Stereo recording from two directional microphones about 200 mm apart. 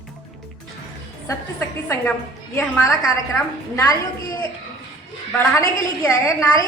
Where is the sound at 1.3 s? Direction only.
10° left (ahead or behind).